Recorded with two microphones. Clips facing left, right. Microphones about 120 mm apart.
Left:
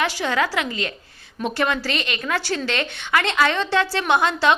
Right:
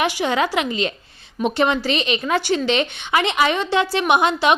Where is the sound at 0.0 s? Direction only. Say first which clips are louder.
Right 2 dB; 20° right (ahead or behind).